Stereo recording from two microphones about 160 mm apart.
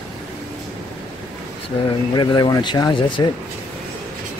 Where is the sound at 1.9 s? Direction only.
30° left (ahead or behind).